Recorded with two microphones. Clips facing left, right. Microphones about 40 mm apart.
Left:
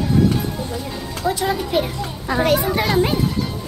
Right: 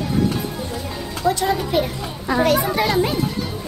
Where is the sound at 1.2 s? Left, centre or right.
Centre.